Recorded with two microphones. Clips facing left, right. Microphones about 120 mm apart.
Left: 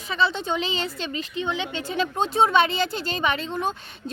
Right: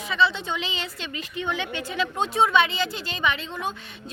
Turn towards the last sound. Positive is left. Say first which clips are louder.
# left 2 dB
turn(degrees=35)  # may be behind; listen again after turning